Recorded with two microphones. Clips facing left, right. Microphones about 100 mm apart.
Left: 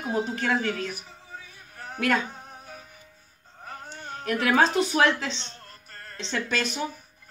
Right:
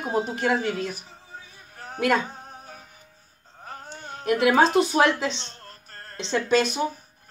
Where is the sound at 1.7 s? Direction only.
35° right (ahead or behind).